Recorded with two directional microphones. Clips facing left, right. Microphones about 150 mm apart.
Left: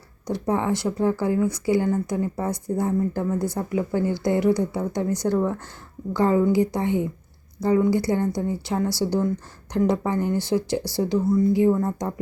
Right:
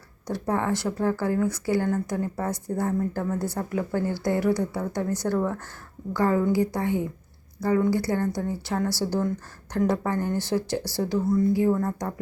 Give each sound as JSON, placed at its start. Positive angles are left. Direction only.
{"t": 0.3, "sound": "a woman's voice", "side_deg": 15}